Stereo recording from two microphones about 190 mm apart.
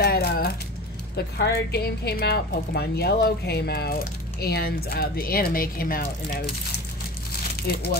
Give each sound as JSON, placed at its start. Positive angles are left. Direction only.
{"t": 0.0, "sound": "a sound", "side_deg": 55}
{"t": 1.1, "sound": "speech", "side_deg": 60}
{"t": 7.6, "sound": "speech", "side_deg": 55}